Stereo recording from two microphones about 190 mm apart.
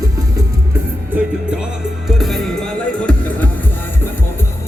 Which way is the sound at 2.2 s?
Centre (ahead or behind).